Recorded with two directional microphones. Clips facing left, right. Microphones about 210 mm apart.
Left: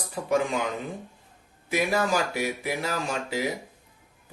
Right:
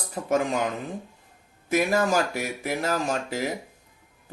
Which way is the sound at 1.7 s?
45° right (ahead or behind).